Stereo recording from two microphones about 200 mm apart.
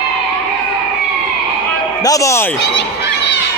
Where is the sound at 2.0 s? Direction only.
15° left (ahead or behind).